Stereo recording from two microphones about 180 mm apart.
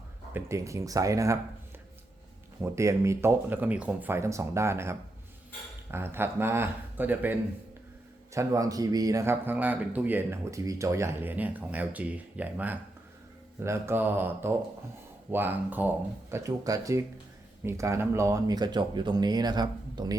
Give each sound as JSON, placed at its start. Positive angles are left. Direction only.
{"t": 0.3, "sound": "speech", "side_deg": -15}
{"t": 2.6, "sound": "speech", "side_deg": -15}